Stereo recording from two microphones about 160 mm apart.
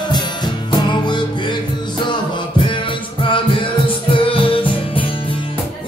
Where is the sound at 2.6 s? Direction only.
30° left (ahead or behind).